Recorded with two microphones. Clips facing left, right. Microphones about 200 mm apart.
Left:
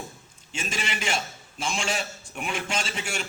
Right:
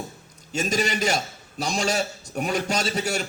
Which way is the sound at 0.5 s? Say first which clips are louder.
Right 8 dB; 40° right (ahead or behind).